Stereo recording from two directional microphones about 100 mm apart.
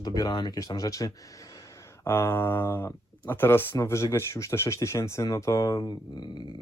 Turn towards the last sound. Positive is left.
turn(degrees=45)  # may be behind; listen again after turning